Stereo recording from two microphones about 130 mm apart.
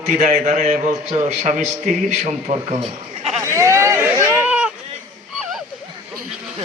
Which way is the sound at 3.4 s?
20° right (ahead or behind).